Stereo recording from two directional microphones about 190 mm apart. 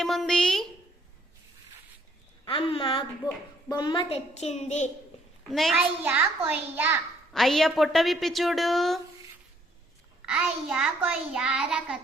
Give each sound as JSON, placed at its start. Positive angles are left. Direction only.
{"t": 0.0, "sound": "a woman's voice", "side_deg": 0}
{"t": 2.4, "sound": "a woman's voice", "side_deg": 30}
{"t": 5.5, "sound": "a child's voice", "side_deg": 0}
{"t": 6.1, "sound": "a child's voice", "side_deg": -10}
{"t": 7.3, "sound": "a child's voice", "side_deg": 0}
{"t": 10.2, "sound": "a child's voice", "side_deg": -5}